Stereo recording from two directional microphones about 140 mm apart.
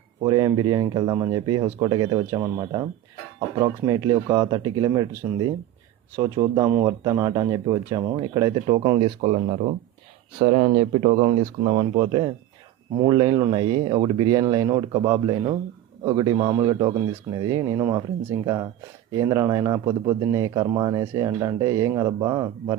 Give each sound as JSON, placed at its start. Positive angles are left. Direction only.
{"t": 0.2, "sound": "speech", "side_deg": -30}
{"t": 9.2, "sound": "speech", "side_deg": -50}